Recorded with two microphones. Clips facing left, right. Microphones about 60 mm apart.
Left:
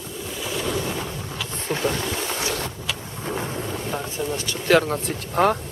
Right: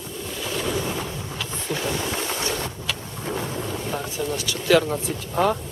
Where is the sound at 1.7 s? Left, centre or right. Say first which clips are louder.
Left 2 dB; left.